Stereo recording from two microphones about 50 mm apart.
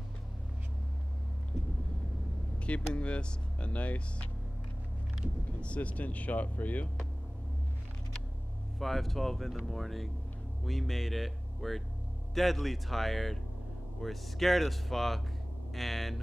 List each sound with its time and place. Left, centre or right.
2.6 s speech: left
5.6 s speech: left
8.7 s speech: centre